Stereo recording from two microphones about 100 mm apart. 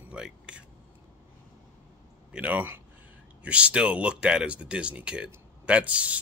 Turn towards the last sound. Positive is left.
turn(degrees=-15)  # may be behind; listen again after turning